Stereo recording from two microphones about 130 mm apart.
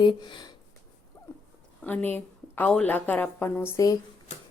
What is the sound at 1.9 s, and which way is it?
A woman's voice, 15° left (ahead or behind).